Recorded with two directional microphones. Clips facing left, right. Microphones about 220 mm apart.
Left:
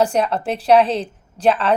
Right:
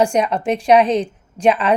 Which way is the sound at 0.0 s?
10° right (ahead or behind).